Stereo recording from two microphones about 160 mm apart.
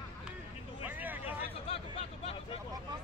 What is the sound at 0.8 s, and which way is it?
Vehicle, 10° right (ahead or behind).